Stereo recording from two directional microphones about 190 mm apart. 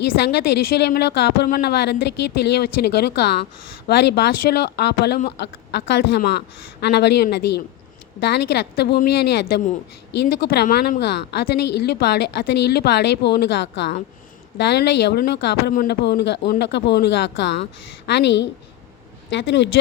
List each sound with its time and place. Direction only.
0.1 s speech: 55° left (ahead or behind)